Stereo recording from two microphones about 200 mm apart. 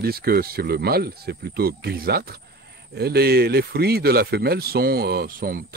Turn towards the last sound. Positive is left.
turn(degrees=-45)  # may be behind; listen again after turning